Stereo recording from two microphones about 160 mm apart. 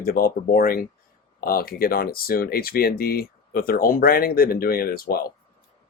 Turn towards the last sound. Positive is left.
turn(degrees=70)  # may be behind; listen again after turning